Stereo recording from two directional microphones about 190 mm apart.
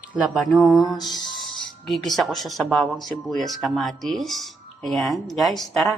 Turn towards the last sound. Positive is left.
turn(degrees=0)  # may be behind; listen again after turning